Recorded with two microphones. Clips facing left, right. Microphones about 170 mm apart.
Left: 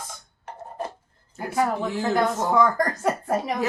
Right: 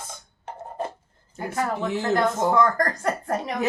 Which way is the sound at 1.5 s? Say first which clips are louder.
Left 2 dB; 5° left (ahead or behind).